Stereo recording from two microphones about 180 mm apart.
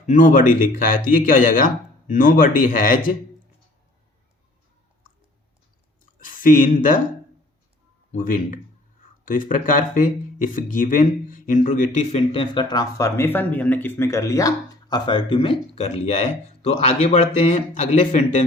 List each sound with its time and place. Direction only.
0.0 s speech: 45° left (ahead or behind)
6.1 s speech: 50° left (ahead or behind)
8.1 s a man's voice: 50° left (ahead or behind)